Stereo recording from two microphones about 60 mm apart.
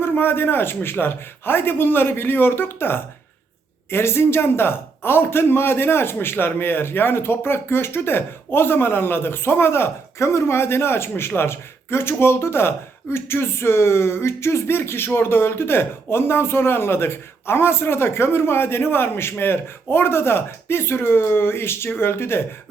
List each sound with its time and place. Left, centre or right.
0.0 s a man's voice: left